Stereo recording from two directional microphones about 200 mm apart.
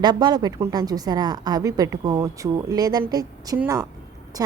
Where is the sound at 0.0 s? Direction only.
20° right (ahead or behind).